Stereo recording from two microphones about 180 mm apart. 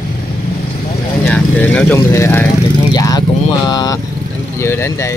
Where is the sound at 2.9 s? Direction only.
20° left (ahead or behind).